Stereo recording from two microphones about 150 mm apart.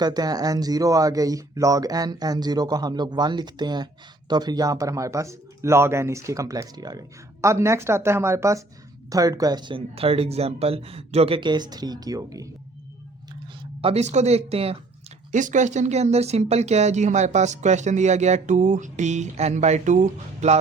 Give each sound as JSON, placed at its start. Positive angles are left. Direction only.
{"t": 0.0, "sound": "speech", "side_deg": -25}
{"t": 13.6, "sound": "speech", "side_deg": -40}
{"t": 15.3, "sound": "speech", "side_deg": -55}